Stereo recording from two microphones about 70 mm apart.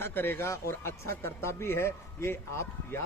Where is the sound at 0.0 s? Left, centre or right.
Left.